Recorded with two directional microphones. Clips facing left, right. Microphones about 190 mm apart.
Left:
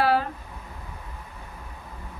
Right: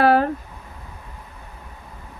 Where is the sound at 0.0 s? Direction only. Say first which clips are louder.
Right 6 dB; 55° right (ahead or behind).